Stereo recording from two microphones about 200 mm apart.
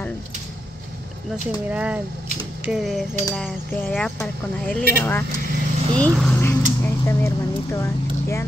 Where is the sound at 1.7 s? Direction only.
5° right (ahead or behind).